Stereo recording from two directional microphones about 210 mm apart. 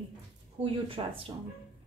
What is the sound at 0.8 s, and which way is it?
Speech, 25° right (ahead or behind).